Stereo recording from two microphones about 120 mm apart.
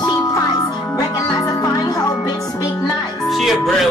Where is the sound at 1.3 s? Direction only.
30° left (ahead or behind).